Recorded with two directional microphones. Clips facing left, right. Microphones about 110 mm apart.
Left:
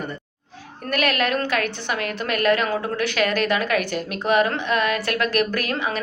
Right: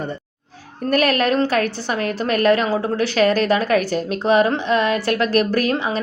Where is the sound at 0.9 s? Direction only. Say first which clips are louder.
Right 5 dB; 40° right (ahead or behind).